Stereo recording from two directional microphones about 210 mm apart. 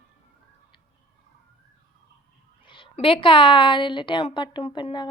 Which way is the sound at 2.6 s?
25° left (ahead or behind).